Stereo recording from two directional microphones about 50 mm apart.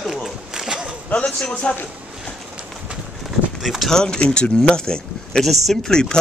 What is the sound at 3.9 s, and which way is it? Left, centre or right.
Speech, centre.